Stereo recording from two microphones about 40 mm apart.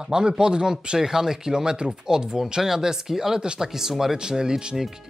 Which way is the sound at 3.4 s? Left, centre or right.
Right.